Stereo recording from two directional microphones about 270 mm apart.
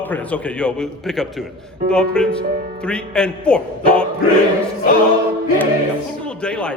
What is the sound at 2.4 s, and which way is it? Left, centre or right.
Speech, right.